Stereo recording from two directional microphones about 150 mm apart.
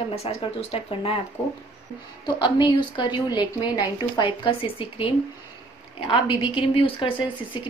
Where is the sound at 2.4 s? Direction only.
30° left (ahead or behind).